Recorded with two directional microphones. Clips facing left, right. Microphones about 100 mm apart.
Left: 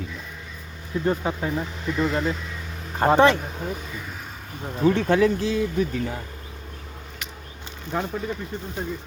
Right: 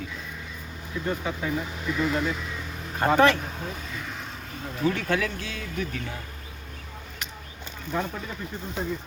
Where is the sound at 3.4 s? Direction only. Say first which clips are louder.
Left 4 dB; 10° left (ahead or behind).